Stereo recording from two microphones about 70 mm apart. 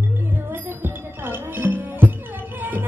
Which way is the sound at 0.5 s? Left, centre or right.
Right.